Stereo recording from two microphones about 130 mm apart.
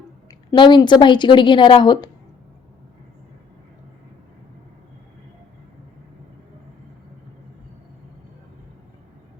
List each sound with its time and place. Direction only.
0.3 s a woman's voice: 35° left (ahead or behind)